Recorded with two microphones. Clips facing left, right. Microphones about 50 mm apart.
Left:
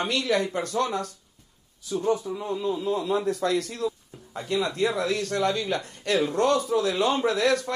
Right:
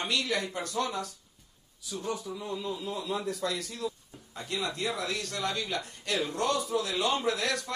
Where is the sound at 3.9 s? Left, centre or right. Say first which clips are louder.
Left 8 dB; left.